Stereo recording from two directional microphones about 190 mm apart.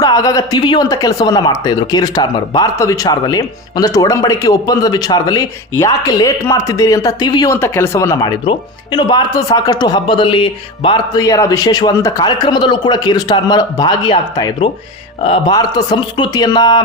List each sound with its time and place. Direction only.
0.0 s speech: 20° left (ahead or behind)